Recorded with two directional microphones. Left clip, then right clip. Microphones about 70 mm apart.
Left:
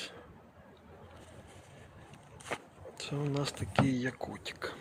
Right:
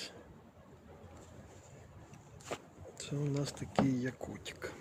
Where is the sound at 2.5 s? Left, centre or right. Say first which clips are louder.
Left 4 dB; left.